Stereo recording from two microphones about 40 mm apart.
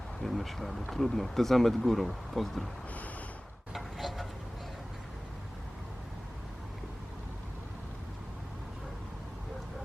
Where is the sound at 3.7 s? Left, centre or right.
Centre.